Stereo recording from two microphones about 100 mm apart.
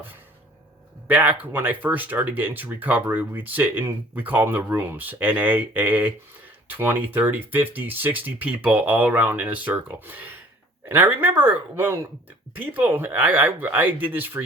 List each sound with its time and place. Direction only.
1.0 s speech: 15° right (ahead or behind)